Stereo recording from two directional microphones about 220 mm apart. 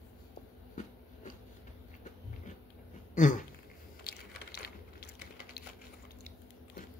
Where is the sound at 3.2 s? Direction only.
35° left (ahead or behind).